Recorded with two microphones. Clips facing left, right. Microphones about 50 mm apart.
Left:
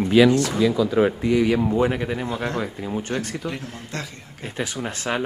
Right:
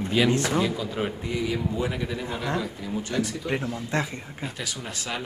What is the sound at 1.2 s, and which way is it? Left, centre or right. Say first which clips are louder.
A man's voice: left 9 dB; left.